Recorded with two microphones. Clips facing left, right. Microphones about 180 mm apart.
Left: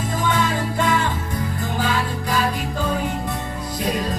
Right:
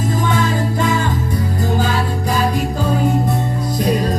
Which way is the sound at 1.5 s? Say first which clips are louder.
Right 4 dB; 40° right (ahead or behind).